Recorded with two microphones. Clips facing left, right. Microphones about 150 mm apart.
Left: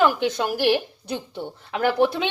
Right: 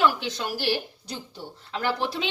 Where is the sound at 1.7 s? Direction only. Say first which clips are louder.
Left 7 dB; 55° left (ahead or behind).